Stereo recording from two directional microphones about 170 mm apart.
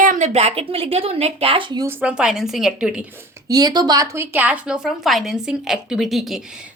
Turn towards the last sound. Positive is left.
turn(degrees=0)  # may be behind; listen again after turning